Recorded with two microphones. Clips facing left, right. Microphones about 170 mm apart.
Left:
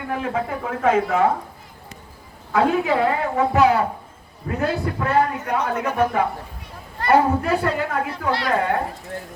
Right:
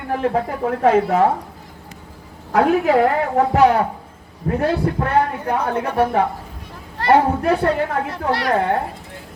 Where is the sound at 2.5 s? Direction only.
60° right (ahead or behind).